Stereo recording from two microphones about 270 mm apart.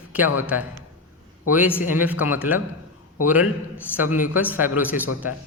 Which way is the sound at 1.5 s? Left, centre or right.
Centre.